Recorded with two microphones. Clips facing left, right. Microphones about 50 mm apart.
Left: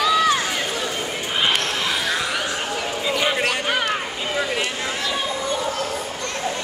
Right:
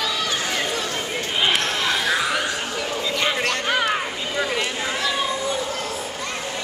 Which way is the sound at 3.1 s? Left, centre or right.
Centre.